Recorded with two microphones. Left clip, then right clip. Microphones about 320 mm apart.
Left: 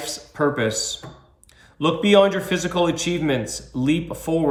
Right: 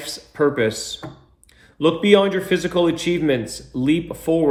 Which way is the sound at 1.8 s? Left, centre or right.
Centre.